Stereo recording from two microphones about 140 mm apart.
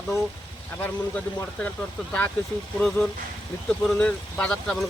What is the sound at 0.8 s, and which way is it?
Speech, 10° left (ahead or behind).